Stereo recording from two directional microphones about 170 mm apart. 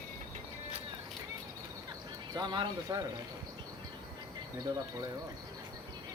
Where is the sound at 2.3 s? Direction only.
25° right (ahead or behind).